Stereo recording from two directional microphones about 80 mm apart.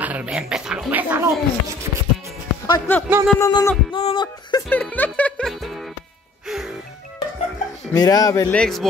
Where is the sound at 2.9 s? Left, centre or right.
Left.